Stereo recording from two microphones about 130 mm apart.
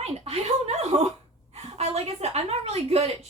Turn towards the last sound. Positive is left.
turn(degrees=-50)  # may be behind; listen again after turning